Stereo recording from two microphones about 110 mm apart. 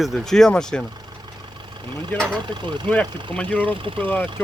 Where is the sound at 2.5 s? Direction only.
45° right (ahead or behind).